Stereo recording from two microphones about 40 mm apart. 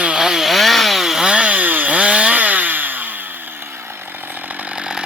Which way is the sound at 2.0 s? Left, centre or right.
Right.